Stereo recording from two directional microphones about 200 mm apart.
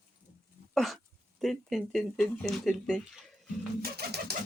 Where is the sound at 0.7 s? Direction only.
Centre (ahead or behind).